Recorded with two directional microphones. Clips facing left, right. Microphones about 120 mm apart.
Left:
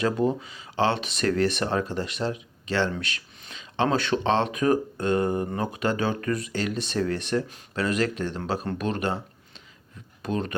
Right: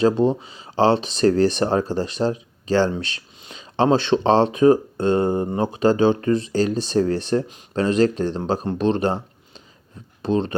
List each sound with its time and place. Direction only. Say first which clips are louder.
0.0 s speech: right 6 dB; 25° right (ahead or behind)
10.2 s speech: right 7 dB; 25° right (ahead or behind)